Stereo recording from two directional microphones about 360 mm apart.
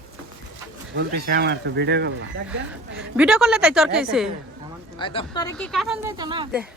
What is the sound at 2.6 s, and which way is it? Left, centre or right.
Speech, centre.